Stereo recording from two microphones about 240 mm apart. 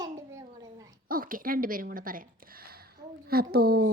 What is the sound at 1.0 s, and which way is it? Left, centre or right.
A child's voice, right.